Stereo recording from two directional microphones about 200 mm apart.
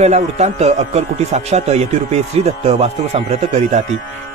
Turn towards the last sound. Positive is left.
turn(degrees=-35)  # may be behind; listen again after turning